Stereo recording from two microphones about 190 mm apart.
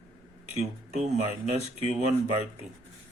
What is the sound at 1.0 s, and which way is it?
Speech, 35° right (ahead or behind).